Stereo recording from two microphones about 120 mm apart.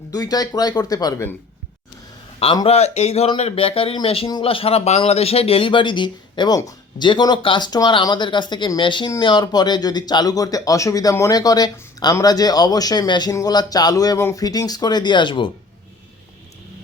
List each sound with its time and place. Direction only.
0.1 s speech: 30° left (ahead or behind)
2.6 s speech: 65° left (ahead or behind); by 15.4 s 40° left (ahead or behind)